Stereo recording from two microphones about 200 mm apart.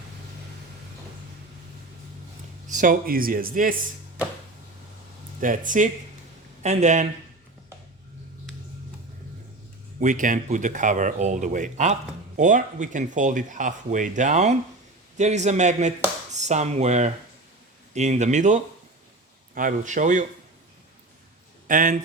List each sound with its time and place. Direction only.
2.6 s speech: 40° right (ahead or behind)
5.4 s speech: 40° right (ahead or behind)
10.0 s speech: 40° right (ahead or behind)
21.7 s speech: 40° right (ahead or behind)